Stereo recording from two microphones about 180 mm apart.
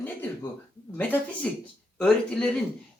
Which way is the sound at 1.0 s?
10° left (ahead or behind).